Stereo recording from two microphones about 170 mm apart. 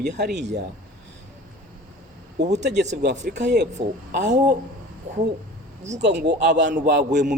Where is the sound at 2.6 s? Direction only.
90° right.